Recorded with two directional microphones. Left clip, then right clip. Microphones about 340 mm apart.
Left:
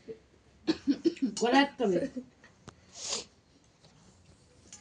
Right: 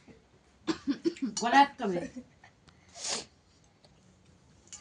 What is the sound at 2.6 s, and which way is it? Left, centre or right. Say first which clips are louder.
Sneeze: right 1 dB; right.